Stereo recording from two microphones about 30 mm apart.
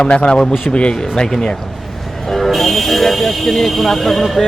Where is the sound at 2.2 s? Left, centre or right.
Centre.